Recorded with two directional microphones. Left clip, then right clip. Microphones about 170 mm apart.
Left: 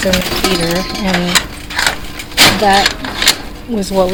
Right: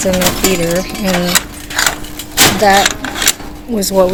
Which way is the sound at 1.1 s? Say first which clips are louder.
Left 1 dB; 80° right.